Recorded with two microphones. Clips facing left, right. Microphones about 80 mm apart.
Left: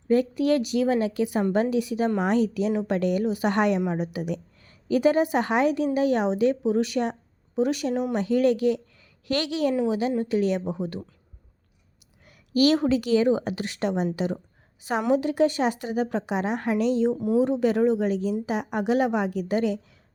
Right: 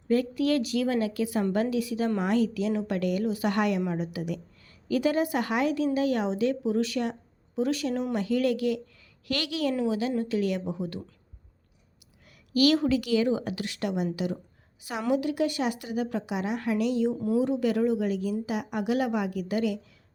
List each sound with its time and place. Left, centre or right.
0.1 s a woman's voice: left
12.2 s a woman's voice: left